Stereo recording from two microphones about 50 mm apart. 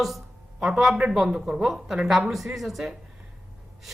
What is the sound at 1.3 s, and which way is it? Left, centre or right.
Speech, centre.